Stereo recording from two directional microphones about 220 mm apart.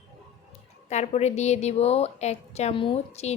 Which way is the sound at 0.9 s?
30° left (ahead or behind).